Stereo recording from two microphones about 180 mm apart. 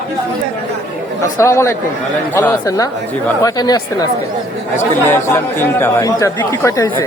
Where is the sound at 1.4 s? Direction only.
15° left (ahead or behind).